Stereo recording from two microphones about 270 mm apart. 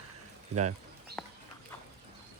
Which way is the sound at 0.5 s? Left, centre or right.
Right.